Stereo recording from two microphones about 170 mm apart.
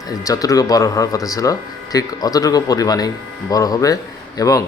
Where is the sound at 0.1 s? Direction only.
20° left (ahead or behind).